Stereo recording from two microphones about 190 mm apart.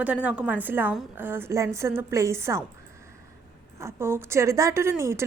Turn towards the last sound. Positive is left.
turn(degrees=-15)  # may be behind; listen again after turning